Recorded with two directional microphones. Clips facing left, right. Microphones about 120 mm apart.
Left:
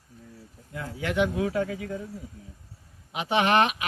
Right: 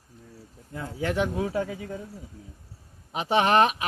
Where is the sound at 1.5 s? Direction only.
25° right (ahead or behind).